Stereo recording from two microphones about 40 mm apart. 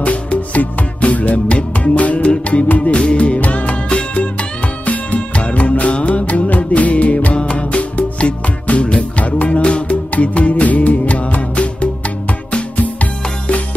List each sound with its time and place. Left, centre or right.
0.0 s music: left
7.3 s music: left